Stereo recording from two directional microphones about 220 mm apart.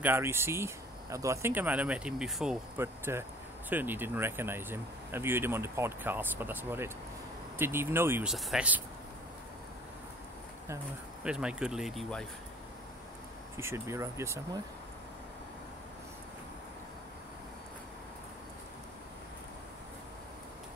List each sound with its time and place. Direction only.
0.0 s speech: 10° right (ahead or behind)
11.2 s speech: 5° right (ahead or behind)
13.6 s speech: 10° right (ahead or behind)